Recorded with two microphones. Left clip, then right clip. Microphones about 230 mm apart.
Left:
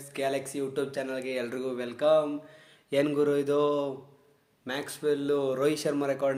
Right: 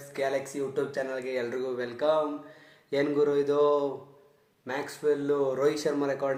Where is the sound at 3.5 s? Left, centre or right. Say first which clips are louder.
Right 2 dB; left.